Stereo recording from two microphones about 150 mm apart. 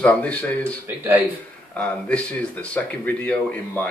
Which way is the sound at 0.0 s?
10° left (ahead or behind).